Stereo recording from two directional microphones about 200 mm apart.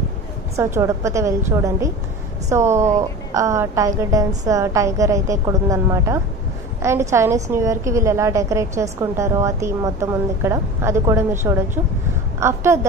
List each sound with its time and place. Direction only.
0.6 s a woman's voice: 15° right (ahead or behind)